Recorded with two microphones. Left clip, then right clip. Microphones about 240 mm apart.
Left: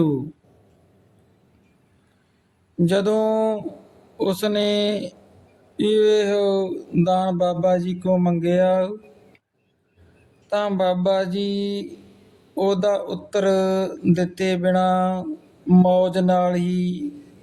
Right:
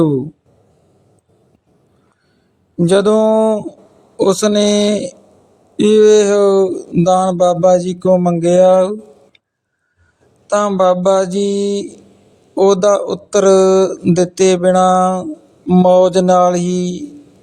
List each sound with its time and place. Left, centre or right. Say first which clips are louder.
2.7 s speech: right 8 dB; right
10.4 s speech: right 9 dB; right